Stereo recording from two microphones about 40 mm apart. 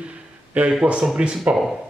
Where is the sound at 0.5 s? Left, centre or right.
Right.